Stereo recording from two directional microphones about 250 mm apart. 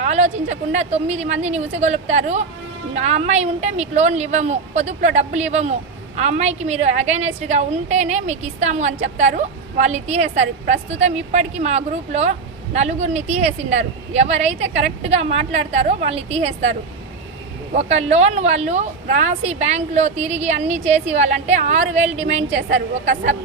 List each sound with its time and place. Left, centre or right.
0.0 s a sound: right
0.5 s a woman's voice: right
17.7 s a woman's voice: right